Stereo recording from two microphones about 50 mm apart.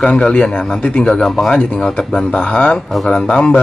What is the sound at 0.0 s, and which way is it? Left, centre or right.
Speech, left.